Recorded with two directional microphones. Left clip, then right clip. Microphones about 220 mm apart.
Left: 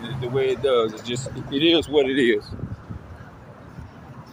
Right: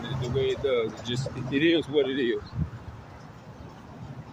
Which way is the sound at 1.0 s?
10° left (ahead or behind).